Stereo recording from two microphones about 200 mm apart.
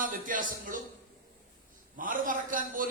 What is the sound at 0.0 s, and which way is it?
Speech, 45° right (ahead or behind).